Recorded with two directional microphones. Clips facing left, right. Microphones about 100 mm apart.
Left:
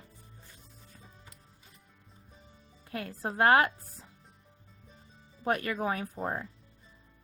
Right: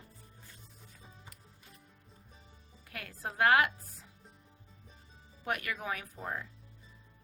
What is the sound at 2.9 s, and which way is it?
Speech, 30° left (ahead or behind).